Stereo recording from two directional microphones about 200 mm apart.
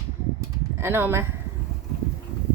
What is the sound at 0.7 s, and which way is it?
Speech, 10° right (ahead or behind).